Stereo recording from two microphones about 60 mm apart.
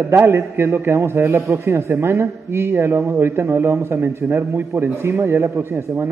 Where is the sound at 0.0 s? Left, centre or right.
Right.